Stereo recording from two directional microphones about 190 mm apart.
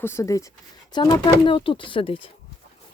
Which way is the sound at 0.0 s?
15° left (ahead or behind).